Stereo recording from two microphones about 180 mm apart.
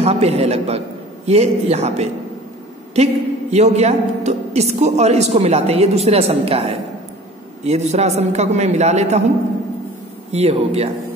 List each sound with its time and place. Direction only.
0.0 s a man's voice: 35° right (ahead or behind)
10.3 s a woman's voice: 35° right (ahead or behind)